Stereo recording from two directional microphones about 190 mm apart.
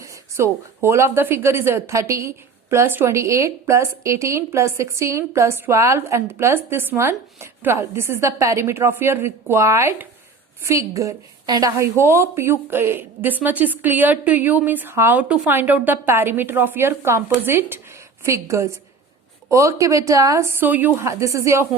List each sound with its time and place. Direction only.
0.0 s speech: 15° right (ahead or behind)